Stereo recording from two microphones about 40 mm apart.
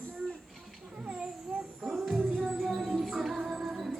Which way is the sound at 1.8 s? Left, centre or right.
Centre.